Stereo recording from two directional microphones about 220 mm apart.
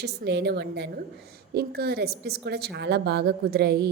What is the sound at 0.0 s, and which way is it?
A woman's voice, 50° right (ahead or behind).